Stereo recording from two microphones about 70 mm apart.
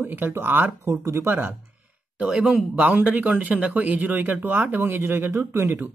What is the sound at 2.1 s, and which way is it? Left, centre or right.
Speech, centre.